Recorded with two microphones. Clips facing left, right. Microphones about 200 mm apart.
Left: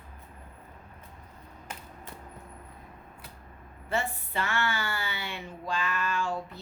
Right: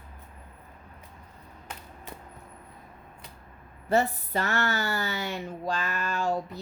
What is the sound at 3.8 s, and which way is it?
Speech, 40° right (ahead or behind).